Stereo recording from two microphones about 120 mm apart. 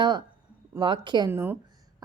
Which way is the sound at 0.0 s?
40° right (ahead or behind).